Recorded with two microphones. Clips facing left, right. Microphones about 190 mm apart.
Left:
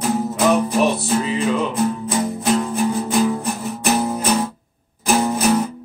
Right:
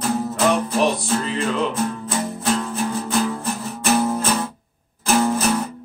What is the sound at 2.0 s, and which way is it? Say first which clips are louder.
Music: left 3 dB; 15° left (ahead or behind).